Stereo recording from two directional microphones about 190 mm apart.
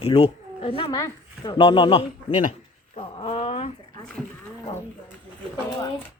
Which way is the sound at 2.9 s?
30° left (ahead or behind).